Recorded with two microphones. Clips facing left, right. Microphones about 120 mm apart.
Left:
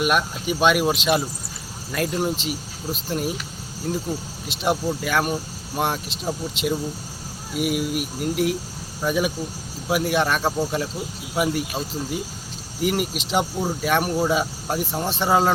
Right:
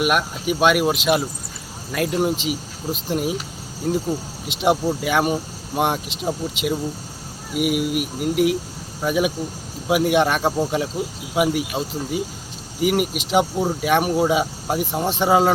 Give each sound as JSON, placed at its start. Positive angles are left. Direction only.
{"t": 0.0, "sound": "speech", "side_deg": -10}
{"t": 4.4, "sound": "speech", "side_deg": -20}